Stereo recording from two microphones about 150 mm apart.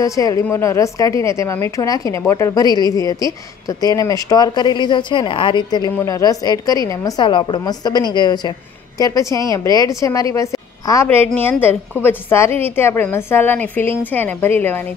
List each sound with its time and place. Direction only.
0.0 s a woman's voice: 20° left (ahead or behind)